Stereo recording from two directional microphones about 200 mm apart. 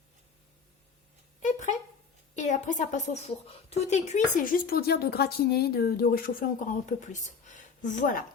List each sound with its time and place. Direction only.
2.3 s a woman's voice: 35° left (ahead or behind)